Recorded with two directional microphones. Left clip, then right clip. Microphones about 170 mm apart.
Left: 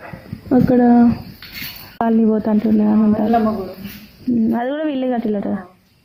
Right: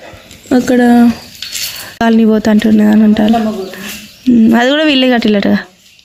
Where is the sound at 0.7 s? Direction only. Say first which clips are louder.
Right 5 dB; 20° right (ahead or behind).